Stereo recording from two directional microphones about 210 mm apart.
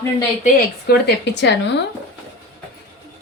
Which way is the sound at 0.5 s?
50° left (ahead or behind).